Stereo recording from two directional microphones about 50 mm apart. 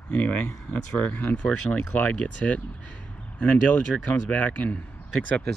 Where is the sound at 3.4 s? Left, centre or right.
Left.